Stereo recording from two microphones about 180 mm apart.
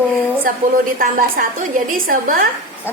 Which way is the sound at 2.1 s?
55° right (ahead or behind).